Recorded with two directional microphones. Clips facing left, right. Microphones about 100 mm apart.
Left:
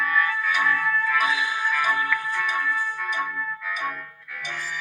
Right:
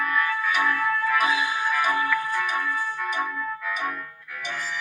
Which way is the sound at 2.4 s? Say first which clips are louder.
Even; 5° right (ahead or behind).